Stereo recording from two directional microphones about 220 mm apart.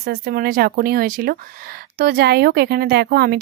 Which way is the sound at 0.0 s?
45° right (ahead or behind).